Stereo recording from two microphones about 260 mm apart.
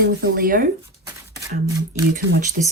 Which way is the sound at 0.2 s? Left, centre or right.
Right.